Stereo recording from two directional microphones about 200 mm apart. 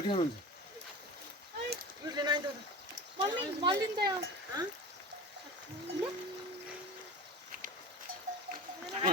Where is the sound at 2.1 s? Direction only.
20° right (ahead or behind).